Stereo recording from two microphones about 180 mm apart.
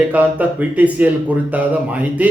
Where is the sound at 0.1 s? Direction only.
10° right (ahead or behind).